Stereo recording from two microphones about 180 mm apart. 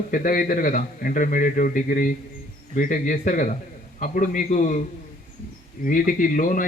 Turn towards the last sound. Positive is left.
turn(degrees=45)  # may be behind; listen again after turning